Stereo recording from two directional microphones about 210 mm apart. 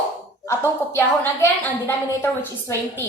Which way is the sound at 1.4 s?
10° left (ahead or behind).